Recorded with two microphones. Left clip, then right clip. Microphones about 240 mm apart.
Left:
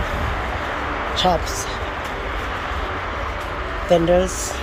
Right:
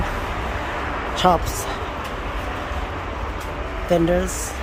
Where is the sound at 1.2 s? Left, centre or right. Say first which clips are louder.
Right 2 dB; centre.